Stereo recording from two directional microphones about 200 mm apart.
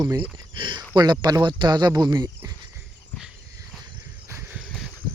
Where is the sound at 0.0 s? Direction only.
20° right (ahead or behind).